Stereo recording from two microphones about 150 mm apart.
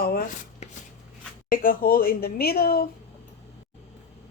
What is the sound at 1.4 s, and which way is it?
Speech, 70° left (ahead or behind).